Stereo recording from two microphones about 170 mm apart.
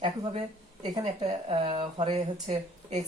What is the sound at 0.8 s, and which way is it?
Speech, 30° right (ahead or behind).